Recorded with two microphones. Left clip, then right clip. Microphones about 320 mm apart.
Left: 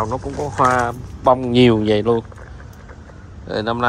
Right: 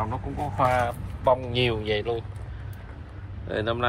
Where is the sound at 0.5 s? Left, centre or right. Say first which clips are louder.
Left 7 dB; left.